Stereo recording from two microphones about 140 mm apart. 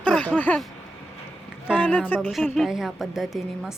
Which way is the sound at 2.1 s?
15° left (ahead or behind).